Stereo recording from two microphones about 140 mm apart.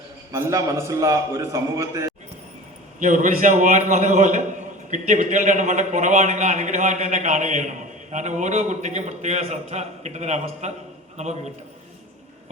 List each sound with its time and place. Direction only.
0.3 s a man's voice: 20° right (ahead or behind)
3.0 s a man's voice: 65° right (ahead or behind)